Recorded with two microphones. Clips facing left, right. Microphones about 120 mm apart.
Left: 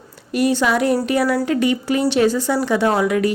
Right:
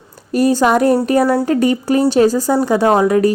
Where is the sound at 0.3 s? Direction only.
40° right (ahead or behind).